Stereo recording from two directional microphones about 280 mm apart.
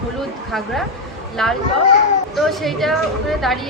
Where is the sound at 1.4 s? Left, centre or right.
Centre.